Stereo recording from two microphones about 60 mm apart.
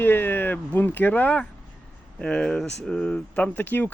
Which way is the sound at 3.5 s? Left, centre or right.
Left.